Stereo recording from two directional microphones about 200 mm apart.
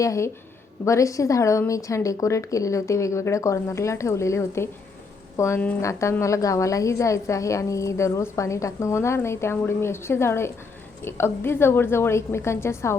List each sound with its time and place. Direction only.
0.0 s a woman's voice: 15° left (ahead or behind)